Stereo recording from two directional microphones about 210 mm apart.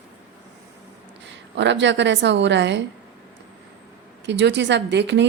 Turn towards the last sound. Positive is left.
turn(degrees=-55)  # may be behind; listen again after turning